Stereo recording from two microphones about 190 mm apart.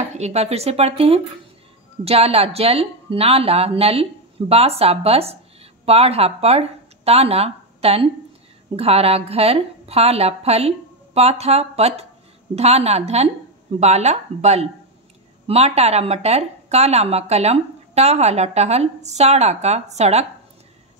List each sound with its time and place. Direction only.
0.1 s speech: 35° right (ahead or behind)